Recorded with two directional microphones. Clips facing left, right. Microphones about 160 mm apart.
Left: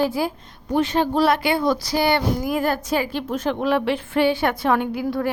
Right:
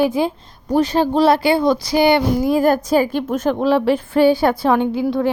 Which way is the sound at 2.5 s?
40° right (ahead or behind).